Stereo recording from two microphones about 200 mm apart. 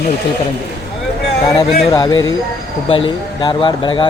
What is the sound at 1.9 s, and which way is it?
Speech, 20° left (ahead or behind).